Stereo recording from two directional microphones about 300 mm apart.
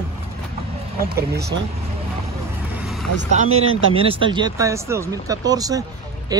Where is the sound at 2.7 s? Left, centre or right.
Centre.